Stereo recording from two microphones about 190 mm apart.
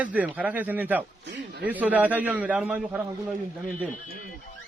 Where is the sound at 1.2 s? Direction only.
65° right (ahead or behind).